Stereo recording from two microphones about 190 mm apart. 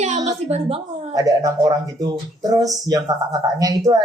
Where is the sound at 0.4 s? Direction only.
35° right (ahead or behind).